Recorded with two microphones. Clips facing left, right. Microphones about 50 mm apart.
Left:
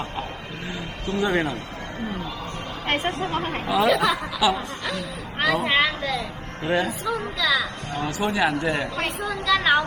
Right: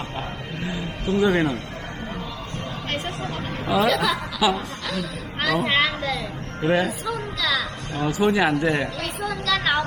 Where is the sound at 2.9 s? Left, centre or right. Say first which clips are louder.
Left 6 dB; left.